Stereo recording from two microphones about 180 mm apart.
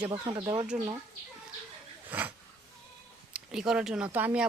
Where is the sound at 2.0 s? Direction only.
10° right (ahead or behind).